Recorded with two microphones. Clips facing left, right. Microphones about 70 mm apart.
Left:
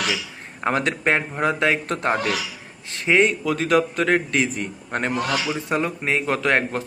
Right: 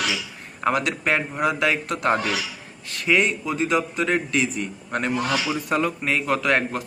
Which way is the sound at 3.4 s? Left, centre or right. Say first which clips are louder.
Left 3 dB; left.